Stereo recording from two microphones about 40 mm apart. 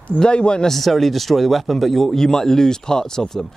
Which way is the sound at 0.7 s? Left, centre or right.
Centre.